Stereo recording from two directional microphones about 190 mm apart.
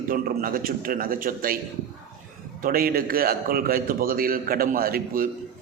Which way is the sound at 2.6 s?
50° right (ahead or behind).